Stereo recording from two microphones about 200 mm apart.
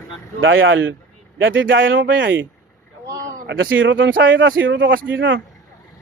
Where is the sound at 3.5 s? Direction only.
70° right (ahead or behind).